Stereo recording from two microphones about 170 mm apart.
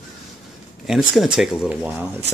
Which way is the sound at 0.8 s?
5° right (ahead or behind).